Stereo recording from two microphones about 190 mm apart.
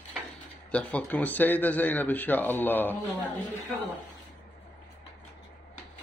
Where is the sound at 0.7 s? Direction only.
5° left (ahead or behind).